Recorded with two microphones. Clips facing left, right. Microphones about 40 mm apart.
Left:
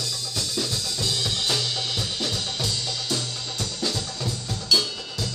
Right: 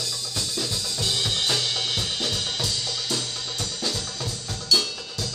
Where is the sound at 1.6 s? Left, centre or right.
Right.